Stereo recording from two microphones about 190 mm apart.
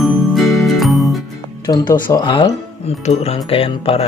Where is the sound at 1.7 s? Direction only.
25° left (ahead or behind).